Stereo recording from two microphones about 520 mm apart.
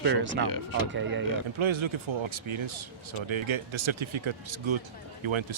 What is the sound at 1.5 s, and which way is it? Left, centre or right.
Speech, right.